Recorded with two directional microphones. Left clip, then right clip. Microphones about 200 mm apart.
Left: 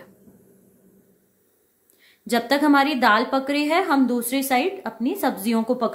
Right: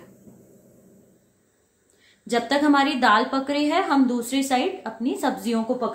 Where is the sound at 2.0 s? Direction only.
30° left (ahead or behind).